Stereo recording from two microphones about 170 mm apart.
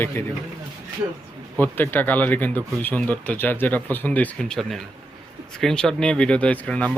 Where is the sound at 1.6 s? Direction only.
10° left (ahead or behind).